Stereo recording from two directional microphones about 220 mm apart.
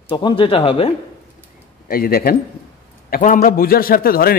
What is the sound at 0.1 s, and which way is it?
Speech, 20° left (ahead or behind).